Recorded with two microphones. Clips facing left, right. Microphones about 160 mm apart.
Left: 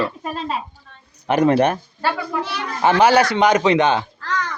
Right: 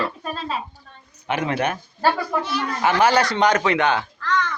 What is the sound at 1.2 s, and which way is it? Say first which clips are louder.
Speech: left 8 dB; 40° left (ahead or behind).